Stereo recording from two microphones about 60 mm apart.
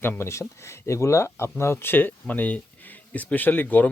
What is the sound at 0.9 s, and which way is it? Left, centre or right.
Speech, left.